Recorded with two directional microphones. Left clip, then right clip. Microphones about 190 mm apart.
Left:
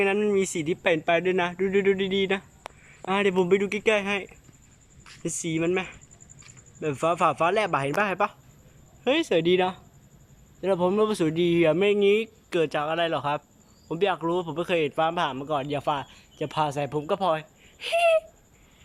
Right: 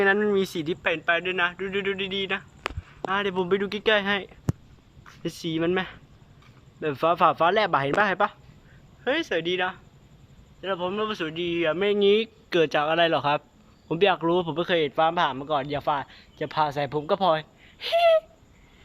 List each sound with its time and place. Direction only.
0.0 s speech: 10° left (ahead or behind)
5.4 s a man's voice: 5° left (ahead or behind)
9.0 s speech: 20° left (ahead or behind)